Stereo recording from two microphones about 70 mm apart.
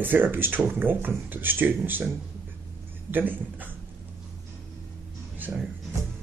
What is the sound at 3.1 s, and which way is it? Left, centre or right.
Speech, right.